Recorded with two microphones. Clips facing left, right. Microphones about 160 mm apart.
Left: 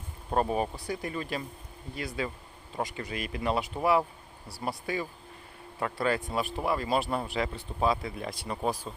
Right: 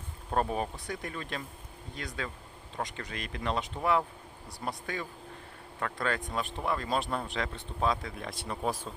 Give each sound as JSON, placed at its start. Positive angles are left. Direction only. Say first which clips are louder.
{"t": 0.3, "sound": "speech", "louder": "left 3 dB", "side_deg": 5}
{"t": 5.8, "sound": "speech", "louder": "left 4 dB", "side_deg": 5}